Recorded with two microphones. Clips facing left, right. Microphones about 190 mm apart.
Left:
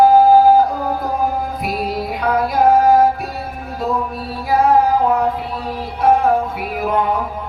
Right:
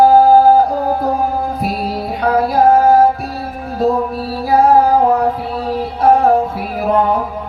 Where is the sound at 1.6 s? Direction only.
30° right (ahead or behind).